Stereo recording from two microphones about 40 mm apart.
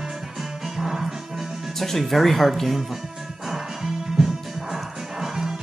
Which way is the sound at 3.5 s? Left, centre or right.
Centre.